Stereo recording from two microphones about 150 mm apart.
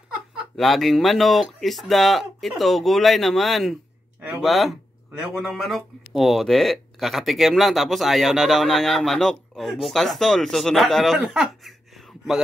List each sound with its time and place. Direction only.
0.4 s speech: centre (ahead or behind)